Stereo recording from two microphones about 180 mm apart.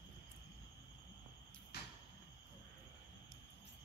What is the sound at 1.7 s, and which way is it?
Cupboard open or close, 65° left (ahead or behind).